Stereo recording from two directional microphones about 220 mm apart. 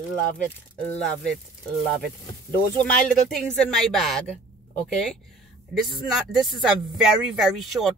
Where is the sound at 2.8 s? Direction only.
5° left (ahead or behind).